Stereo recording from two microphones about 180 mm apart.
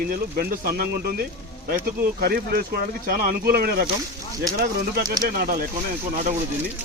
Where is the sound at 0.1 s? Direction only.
55° right (ahead or behind).